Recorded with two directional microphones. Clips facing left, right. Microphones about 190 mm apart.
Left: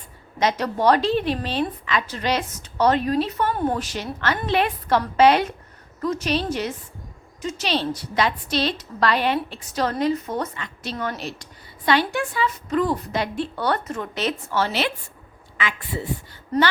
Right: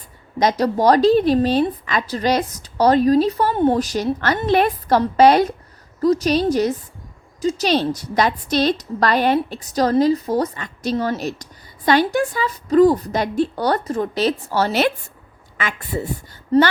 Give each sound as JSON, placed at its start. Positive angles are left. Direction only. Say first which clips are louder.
{"t": 0.3, "sound": "a woman's voice", "louder": "right 5 dB", "side_deg": -40}
{"t": 3.8, "sound": "a woman's voice", "louder": "right 9 dB", "side_deg": -40}
{"t": 10.9, "sound": "a woman's voice", "louder": "right 7 dB", "side_deg": -30}
{"t": 11.2, "sound": "a woman's voice", "louder": "right 7 dB", "side_deg": -40}
{"t": 16.5, "sound": "a woman's voice", "louder": "right 6 dB", "side_deg": -30}